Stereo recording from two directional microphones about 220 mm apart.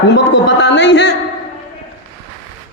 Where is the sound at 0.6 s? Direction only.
55° left (ahead or behind).